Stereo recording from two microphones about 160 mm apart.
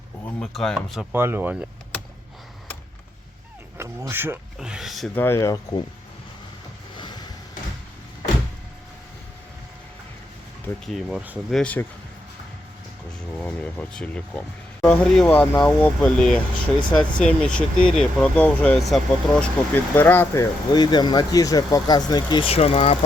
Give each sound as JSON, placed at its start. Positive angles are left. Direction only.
{"t": 0.3, "sound": "speech", "side_deg": 5}
{"t": 1.1, "sound": "speech", "side_deg": -15}
{"t": 3.8, "sound": "speech", "side_deg": -15}
{"t": 4.5, "sound": "speech", "side_deg": -5}
{"t": 5.1, "sound": "speech", "side_deg": 15}
{"t": 6.9, "sound": "vehicle", "side_deg": 30}
{"t": 10.8, "sound": "speech", "side_deg": 0}
{"t": 11.5, "sound": "speech", "side_deg": 10}
{"t": 13.4, "sound": "speech", "side_deg": 10}